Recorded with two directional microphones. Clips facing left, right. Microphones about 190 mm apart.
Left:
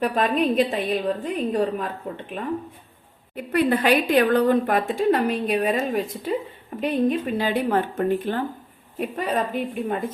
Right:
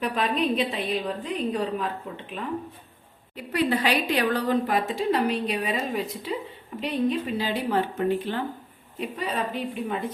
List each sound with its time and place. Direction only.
0.0 s a woman's voice: 50° left (ahead or behind)
3.3 s a woman's voice: 55° left (ahead or behind)